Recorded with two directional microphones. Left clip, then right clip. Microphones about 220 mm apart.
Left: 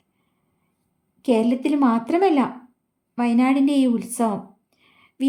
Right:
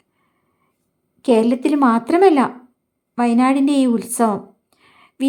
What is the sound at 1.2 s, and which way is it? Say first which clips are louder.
A woman's voice: right 5 dB; 15° right (ahead or behind).